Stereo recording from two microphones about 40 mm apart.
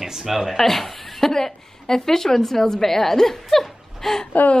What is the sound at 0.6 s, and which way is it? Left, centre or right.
A woman's voice, centre.